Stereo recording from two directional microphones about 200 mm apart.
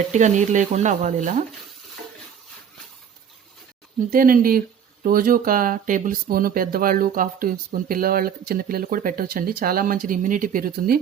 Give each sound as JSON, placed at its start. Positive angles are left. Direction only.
{"t": 0.1, "sound": "speech", "side_deg": -35}
{"t": 4.1, "sound": "speech", "side_deg": -45}